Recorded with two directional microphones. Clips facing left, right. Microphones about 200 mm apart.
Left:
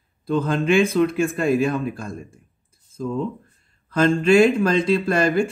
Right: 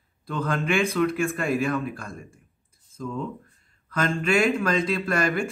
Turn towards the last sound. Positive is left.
turn(degrees=25)  # may be behind; listen again after turning